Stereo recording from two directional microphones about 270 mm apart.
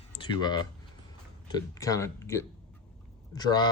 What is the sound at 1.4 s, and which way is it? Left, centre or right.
Speech, centre.